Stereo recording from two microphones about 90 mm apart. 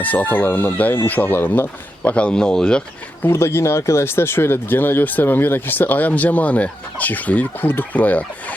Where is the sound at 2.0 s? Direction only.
15° left (ahead or behind).